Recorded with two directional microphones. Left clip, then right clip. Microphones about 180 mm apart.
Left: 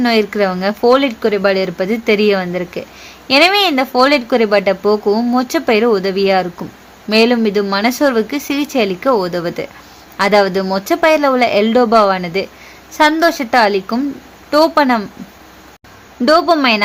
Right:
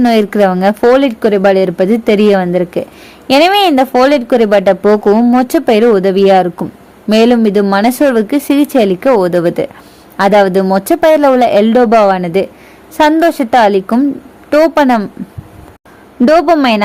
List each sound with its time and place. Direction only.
0.0 s speech: 40° right (ahead or behind)
16.2 s speech: 35° right (ahead or behind)